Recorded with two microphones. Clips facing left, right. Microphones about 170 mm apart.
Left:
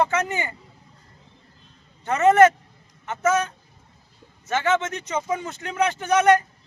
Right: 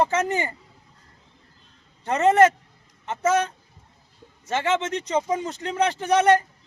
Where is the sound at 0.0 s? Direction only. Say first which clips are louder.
Right 1 dB; 35° right (ahead or behind).